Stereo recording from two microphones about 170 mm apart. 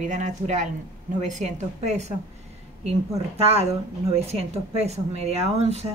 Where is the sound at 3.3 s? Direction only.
40° right (ahead or behind).